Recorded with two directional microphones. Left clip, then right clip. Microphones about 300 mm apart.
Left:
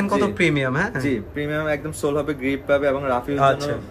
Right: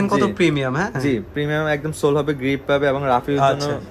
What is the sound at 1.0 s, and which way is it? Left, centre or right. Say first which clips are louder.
Speech: right 3 dB; right.